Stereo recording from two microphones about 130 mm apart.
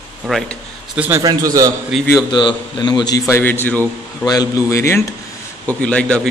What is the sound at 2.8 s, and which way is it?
A man's voice, 30° left (ahead or behind).